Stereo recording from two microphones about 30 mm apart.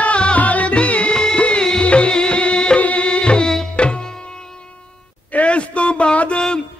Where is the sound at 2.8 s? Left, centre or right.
Left.